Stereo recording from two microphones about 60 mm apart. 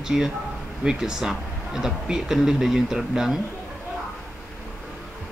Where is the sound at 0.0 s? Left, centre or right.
Centre.